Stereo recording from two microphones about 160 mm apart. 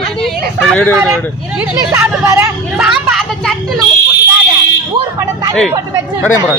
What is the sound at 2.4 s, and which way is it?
Speech, 5° right (ahead or behind).